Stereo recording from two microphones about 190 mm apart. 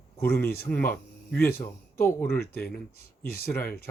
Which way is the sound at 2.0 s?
10° left (ahead or behind).